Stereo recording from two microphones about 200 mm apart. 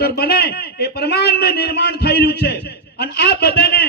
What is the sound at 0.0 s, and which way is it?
A man's voice, 55° left (ahead or behind).